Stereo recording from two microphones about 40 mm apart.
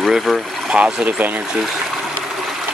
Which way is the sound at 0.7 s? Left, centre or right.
Right.